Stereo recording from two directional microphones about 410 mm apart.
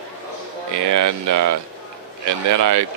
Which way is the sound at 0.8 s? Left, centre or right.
Right.